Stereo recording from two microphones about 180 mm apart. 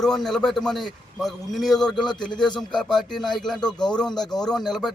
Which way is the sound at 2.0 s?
25° left (ahead or behind).